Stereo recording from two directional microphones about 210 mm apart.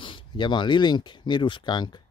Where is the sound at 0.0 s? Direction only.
25° left (ahead or behind).